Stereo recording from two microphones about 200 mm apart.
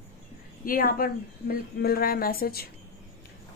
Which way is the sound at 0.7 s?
45° left (ahead or behind).